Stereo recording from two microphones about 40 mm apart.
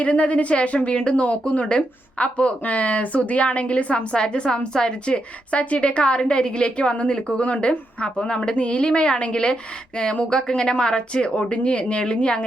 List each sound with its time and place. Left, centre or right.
0.0 s a woman's voice: left